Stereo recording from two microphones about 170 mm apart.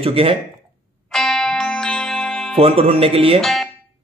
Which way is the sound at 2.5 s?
35° right (ahead or behind).